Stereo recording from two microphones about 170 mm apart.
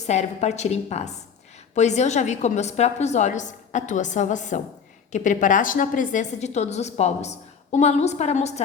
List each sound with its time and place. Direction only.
0.0 s a woman's voice: 40° left (ahead or behind)